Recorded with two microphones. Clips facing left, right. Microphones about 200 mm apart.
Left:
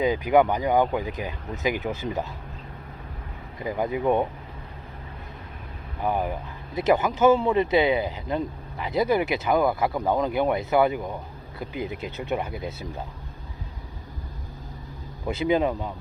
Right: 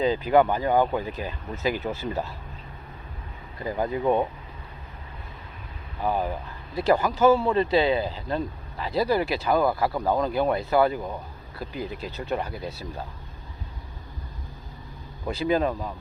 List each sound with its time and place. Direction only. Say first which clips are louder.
0.0 s speech: even; 15° left (ahead or behind)
3.6 s speech: even; 15° left (ahead or behind)
6.0 s speech: even; 15° left (ahead or behind)
15.3 s speech: left 1 dB; 20° left (ahead or behind)